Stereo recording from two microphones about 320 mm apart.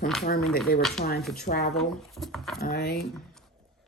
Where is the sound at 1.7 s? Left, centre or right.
Centre.